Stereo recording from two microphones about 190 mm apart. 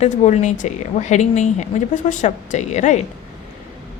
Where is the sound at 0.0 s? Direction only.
35° left (ahead or behind).